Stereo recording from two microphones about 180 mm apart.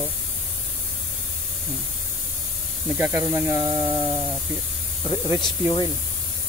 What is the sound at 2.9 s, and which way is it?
Speech, 15° right (ahead or behind).